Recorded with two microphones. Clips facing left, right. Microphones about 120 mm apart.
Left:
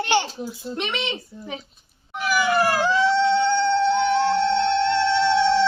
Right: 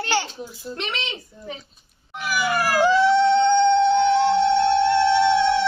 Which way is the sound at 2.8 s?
15° right (ahead or behind).